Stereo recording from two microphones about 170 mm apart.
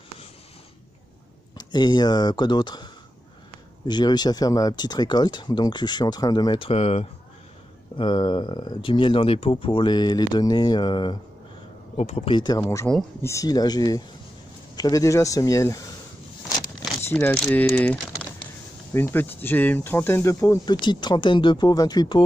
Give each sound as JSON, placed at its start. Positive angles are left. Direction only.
{"t": 1.6, "sound": "speech", "side_deg": 25}
{"t": 6.7, "sound": "speech", "side_deg": 35}
{"t": 12.0, "sound": "speech", "side_deg": 40}
{"t": 17.1, "sound": "speech", "side_deg": 5}